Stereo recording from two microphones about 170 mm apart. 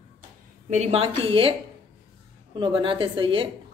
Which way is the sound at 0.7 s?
40° right (ahead or behind).